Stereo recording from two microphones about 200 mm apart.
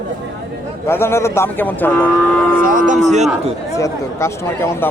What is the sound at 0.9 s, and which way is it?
Speech, 10° left (ahead or behind).